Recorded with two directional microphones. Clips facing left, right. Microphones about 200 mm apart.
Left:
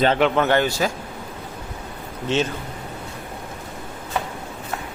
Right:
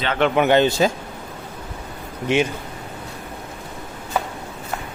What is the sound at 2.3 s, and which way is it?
Speech, 10° right (ahead or behind).